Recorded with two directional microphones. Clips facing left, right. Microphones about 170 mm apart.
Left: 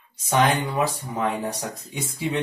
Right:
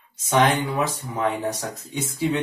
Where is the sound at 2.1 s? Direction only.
10° left (ahead or behind).